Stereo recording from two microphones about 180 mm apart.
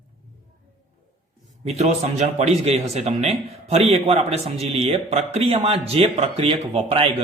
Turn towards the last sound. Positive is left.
turn(degrees=-30)  # may be behind; listen again after turning